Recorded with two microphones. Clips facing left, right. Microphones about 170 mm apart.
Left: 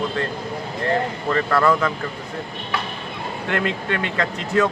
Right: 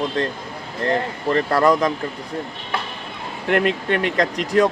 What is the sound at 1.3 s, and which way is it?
Speech, 35° right (ahead or behind).